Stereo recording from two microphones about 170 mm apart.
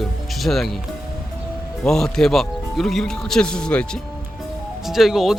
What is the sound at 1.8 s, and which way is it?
Speech, 5° left (ahead or behind).